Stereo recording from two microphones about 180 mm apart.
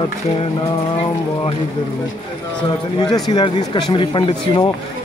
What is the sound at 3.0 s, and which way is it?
Speech, 25° left (ahead or behind).